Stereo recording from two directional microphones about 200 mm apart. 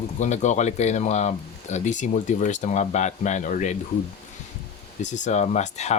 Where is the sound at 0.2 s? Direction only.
35° left (ahead or behind).